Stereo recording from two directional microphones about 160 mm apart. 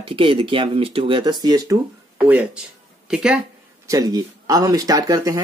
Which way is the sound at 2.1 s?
5° right (ahead or behind).